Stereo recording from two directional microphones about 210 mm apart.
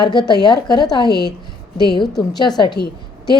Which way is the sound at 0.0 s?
20° left (ahead or behind).